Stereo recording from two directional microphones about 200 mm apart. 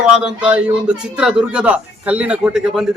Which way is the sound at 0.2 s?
5° right (ahead or behind).